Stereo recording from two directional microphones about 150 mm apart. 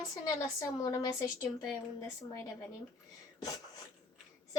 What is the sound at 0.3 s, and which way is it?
Speech, 20° left (ahead or behind).